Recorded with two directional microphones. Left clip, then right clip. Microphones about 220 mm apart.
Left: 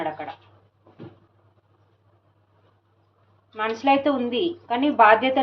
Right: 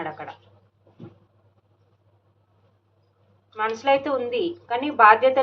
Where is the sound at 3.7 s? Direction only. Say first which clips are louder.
Left 1 dB; 30° left (ahead or behind).